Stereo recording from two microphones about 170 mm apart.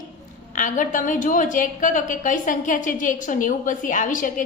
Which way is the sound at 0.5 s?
50° left (ahead or behind).